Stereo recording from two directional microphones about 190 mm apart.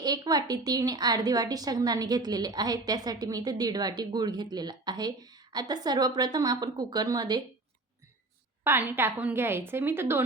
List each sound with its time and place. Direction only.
0.0 s a woman's voice: 20° right (ahead or behind)
8.6 s a woman's voice: 10° right (ahead or behind)